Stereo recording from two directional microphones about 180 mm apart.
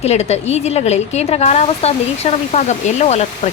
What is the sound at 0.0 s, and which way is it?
Speech, 35° left (ahead or behind).